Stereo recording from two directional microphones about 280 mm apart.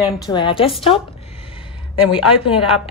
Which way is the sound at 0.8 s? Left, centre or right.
Centre.